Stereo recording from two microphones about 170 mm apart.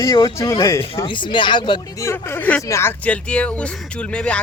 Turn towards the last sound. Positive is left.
turn(degrees=5)  # may be behind; listen again after turning